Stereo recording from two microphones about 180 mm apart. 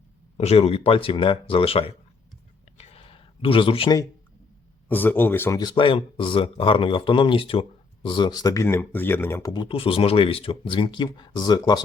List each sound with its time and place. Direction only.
0.3 s speech: 35° left (ahead or behind)
2.7 s a sound: 35° left (ahead or behind)
4.9 s speech: 10° left (ahead or behind)
5.5 s speech: 25° left (ahead or behind)